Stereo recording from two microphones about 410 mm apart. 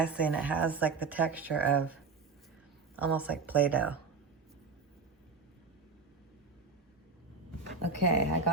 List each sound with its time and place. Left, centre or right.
0.0 s speech: centre
7.8 s speech: right